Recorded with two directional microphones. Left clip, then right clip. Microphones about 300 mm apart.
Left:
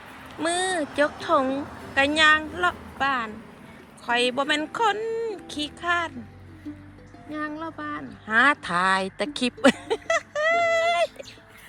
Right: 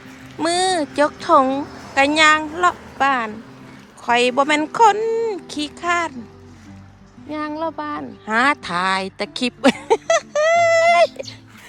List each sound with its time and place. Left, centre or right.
0.3 s a sound: centre
0.9 s speech: centre
7.3 s speech: centre